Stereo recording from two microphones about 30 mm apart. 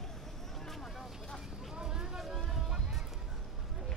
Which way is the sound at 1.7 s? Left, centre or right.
Right.